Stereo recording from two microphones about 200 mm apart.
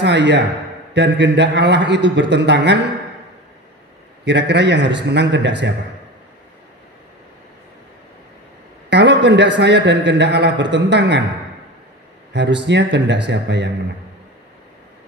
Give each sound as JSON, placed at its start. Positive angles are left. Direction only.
{"t": 0.0, "sound": "a man's voice", "side_deg": -60}
{"t": 4.2, "sound": "a man's voice", "side_deg": -60}
{"t": 8.9, "sound": "a man's voice", "side_deg": -60}
{"t": 12.3, "sound": "a man's voice", "side_deg": -60}